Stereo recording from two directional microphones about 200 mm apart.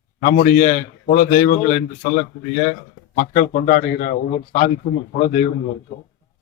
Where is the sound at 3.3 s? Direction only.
45° left (ahead or behind).